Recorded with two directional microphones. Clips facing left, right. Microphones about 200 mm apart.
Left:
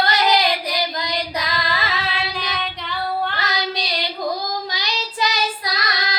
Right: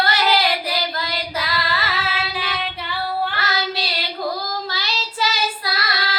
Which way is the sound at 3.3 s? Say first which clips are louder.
Even; 15° left (ahead or behind).